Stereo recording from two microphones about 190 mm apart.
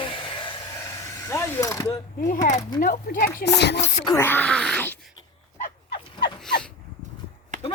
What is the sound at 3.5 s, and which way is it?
Speech, 60° left (ahead or behind).